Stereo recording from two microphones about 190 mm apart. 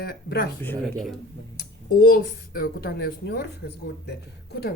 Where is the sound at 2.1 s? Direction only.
50° left (ahead or behind).